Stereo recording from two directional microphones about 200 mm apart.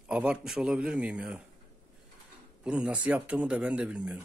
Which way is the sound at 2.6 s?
5° right (ahead or behind).